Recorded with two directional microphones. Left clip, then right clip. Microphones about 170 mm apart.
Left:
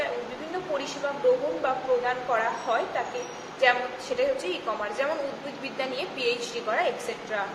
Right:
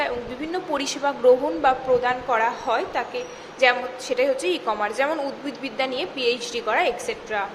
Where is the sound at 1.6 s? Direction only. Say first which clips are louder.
Right 6 dB; 35° right (ahead or behind).